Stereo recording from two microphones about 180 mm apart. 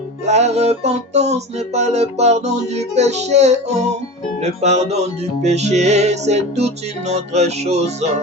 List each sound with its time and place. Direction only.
0.3 s music: 40° right (ahead or behind)